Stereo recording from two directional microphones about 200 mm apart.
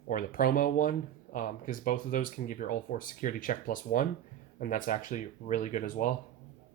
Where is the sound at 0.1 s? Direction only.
45° left (ahead or behind).